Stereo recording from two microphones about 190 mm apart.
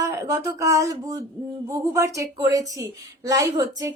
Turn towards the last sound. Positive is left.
turn(degrees=-20)  # may be behind; listen again after turning